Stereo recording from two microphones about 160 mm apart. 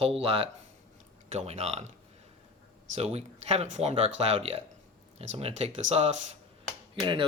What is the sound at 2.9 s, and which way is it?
Speech, 40° right (ahead or behind).